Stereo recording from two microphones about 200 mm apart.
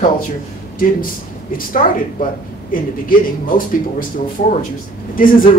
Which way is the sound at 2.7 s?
45° left (ahead or behind).